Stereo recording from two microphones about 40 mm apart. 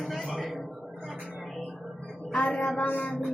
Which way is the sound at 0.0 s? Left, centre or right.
Centre.